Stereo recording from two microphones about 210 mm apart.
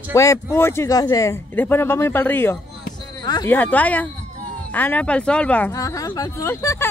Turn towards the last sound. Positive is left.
turn(degrees=15)  # may be behind; listen again after turning